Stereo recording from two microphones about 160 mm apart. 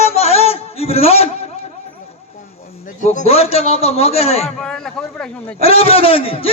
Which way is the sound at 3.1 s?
45° left (ahead or behind).